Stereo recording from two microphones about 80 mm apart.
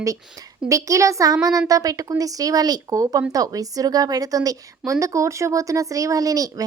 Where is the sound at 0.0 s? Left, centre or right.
Right.